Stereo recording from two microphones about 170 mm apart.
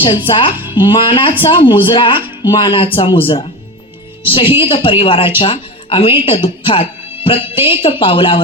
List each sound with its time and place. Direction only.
0.5 s speech: 10° right (ahead or behind)
0.8 s speech: 30° left (ahead or behind)
2.1 s speech: 10° right (ahead or behind)
2.5 s a woman's voice: 30° left (ahead or behind)